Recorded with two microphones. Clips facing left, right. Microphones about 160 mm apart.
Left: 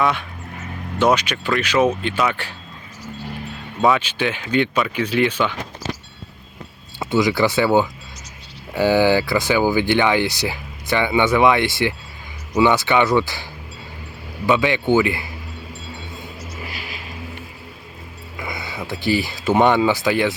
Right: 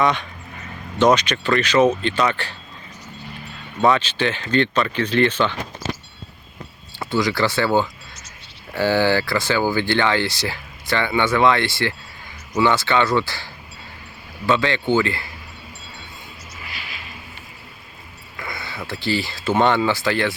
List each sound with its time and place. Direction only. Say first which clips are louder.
0.0 s speech: right 1 dB; 5° left (ahead or behind)
3.8 s speech: even; 5° left (ahead or behind)
7.0 s speech: left 3 dB; 20° left (ahead or behind)
16.6 s vehicle: left 4 dB; 40° left (ahead or behind)
18.3 s a sound: left 2 dB; 20° left (ahead or behind)
19.0 s speech: left 3 dB; 15° left (ahead or behind)